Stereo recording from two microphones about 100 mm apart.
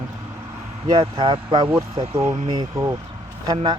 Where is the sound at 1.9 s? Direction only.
90° right.